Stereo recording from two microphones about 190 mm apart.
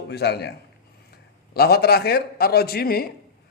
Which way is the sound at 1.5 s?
55° left (ahead or behind).